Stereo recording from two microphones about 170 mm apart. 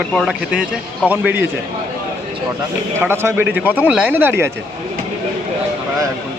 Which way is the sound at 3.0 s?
15° right (ahead or behind).